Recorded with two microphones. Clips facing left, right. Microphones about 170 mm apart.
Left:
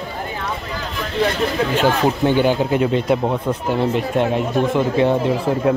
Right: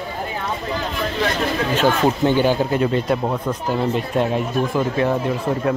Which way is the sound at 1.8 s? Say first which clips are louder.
Even; 15° left (ahead or behind).